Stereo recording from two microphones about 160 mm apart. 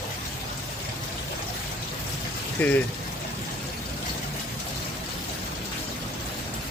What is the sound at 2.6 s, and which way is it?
Speech, 10° left (ahead or behind).